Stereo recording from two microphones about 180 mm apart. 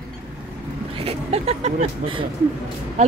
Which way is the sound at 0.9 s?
35° right (ahead or behind).